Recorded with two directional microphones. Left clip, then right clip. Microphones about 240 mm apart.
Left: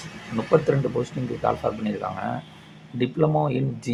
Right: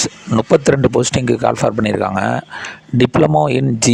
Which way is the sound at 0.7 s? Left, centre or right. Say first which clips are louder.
Right 11 dB; right.